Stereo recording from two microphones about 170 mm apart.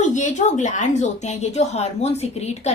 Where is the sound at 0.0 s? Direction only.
45° left (ahead or behind).